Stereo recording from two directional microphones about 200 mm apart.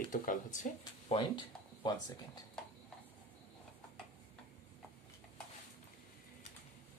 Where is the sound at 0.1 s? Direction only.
40° left (ahead or behind); by 2.4 s 20° left (ahead or behind).